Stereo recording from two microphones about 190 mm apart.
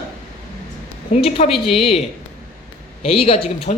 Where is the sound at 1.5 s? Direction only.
Centre (ahead or behind).